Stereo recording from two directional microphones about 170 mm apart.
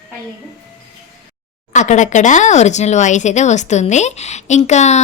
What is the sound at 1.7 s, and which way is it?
Speech, 45° left (ahead or behind).